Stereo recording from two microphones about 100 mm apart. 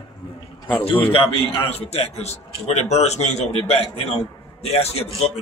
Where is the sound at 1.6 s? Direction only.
90° left.